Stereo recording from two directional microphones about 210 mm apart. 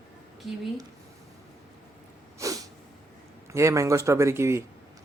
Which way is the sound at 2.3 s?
15° right (ahead or behind).